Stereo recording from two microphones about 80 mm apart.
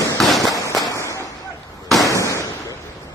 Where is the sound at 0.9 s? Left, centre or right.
Left.